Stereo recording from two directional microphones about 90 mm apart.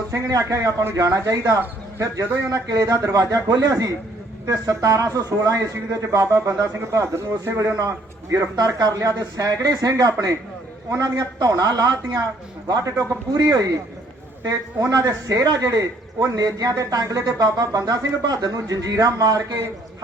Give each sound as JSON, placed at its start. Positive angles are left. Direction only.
{"t": 0.1, "sound": "speech", "side_deg": -35}